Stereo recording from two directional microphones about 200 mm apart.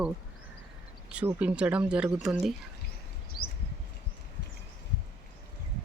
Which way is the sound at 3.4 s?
50° left (ahead or behind).